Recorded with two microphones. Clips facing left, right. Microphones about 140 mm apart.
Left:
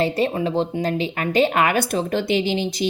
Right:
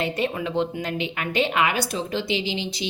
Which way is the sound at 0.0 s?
35° left (ahead or behind).